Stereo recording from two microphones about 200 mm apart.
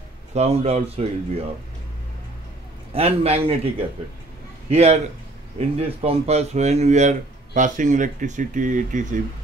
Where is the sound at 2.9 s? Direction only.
30° right (ahead or behind).